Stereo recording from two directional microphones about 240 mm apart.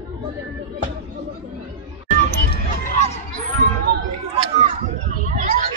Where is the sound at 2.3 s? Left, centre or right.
Left.